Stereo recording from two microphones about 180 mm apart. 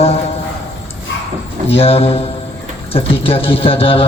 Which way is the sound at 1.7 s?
35° left (ahead or behind).